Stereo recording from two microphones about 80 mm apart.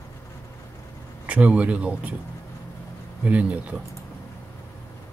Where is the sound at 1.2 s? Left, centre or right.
Centre.